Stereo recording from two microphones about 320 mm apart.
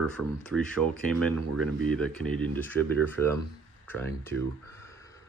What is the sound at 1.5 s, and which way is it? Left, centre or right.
Speech, right.